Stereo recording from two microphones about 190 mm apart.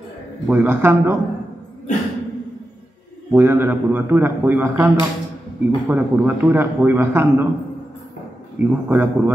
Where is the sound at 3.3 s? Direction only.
10° right (ahead or behind).